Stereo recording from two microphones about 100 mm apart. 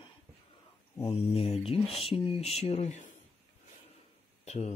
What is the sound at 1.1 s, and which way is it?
Speech, 85° left.